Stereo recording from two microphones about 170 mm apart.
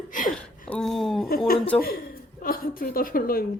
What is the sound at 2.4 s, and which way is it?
A woman's voice, 60° left (ahead or behind).